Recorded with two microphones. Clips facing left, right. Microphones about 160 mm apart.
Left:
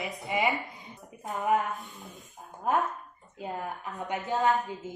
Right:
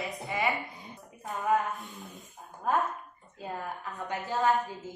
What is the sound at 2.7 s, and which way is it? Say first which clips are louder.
Speech: left 1 dB; 20° left (ahead or behind).